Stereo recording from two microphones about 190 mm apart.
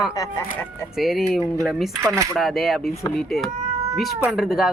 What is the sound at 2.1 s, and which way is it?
Speech, 15° right (ahead or behind).